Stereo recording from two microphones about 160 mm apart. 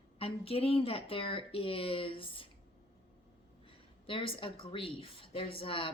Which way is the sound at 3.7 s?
35° left (ahead or behind).